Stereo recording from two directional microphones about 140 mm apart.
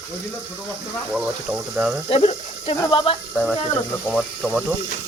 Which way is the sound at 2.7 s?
25° left (ahead or behind).